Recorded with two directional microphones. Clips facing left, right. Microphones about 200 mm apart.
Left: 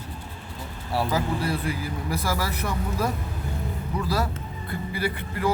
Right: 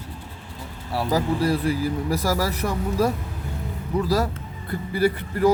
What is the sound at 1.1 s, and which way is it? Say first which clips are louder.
Speech: right 8 dB; 40° right (ahead or behind).